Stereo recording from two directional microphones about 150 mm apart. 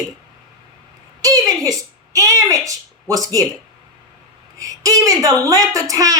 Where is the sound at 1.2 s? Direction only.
25° right (ahead or behind).